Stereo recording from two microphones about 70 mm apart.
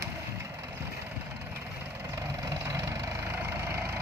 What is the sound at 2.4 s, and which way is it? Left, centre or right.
Vehicle, right.